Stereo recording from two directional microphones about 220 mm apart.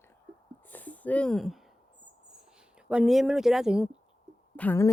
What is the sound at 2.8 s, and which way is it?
A woman's voice, 5° right (ahead or behind).